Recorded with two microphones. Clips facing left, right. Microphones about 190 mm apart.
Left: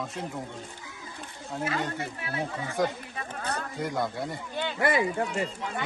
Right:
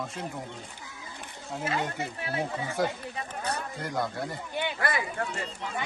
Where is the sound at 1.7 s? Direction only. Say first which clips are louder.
Right 2 dB; 25° right (ahead or behind).